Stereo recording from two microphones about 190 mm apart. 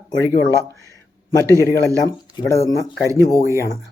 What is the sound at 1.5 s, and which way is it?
Speech, 15° left (ahead or behind).